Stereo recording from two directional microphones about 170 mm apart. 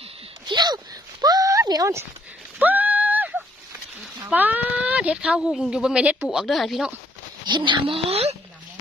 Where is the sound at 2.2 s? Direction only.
10° right (ahead or behind).